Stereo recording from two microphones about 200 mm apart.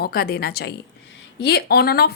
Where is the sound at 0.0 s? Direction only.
50° left (ahead or behind).